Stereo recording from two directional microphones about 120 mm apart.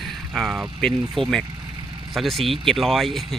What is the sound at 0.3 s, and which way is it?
Speech, 5° right (ahead or behind).